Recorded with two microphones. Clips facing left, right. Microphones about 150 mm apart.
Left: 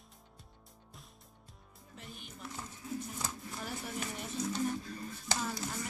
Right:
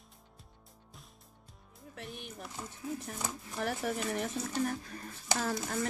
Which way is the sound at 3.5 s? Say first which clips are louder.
Right 8 dB; 65° right (ahead or behind).